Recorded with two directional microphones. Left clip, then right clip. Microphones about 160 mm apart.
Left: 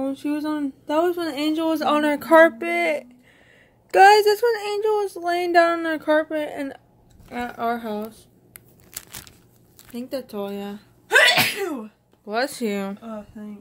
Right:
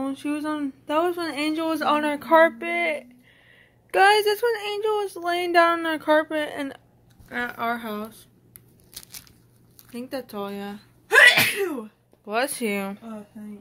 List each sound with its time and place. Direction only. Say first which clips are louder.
0.0 s speech: left 2 dB; 10° left (ahead or behind)
2.0 s speech: left 4 dB; 30° left (ahead or behind); by 8.3 s centre (ahead or behind)
9.9 s speech: left 2 dB; 10° left (ahead or behind); by 11.9 s 35° left (ahead or behind)
12.3 s speech: left 1 dB; 15° left (ahead or behind)